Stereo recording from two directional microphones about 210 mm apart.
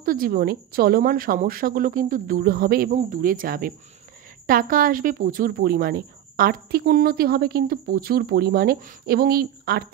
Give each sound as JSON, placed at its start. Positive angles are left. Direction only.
{"t": 0.0, "sound": "speech", "side_deg": -45}